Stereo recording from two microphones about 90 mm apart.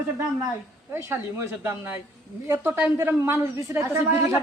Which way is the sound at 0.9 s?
30° right (ahead or behind).